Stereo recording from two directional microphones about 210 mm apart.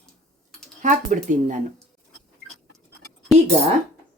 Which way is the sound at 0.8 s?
35° right (ahead or behind).